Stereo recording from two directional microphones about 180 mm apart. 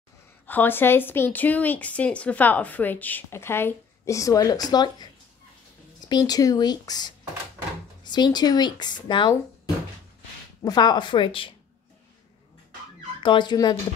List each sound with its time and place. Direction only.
0.5 s speech: 10° left (ahead or behind)
10.6 s speech: 25° left (ahead or behind)
13.2 s speech: 25° left (ahead or behind)